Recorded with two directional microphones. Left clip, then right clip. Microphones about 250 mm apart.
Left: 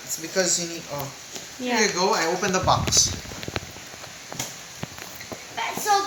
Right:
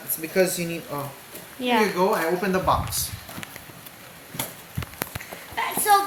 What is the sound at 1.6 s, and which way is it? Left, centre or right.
Speech, centre.